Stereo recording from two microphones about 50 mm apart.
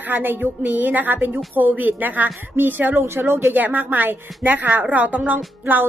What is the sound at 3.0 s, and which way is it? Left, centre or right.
Speech, right.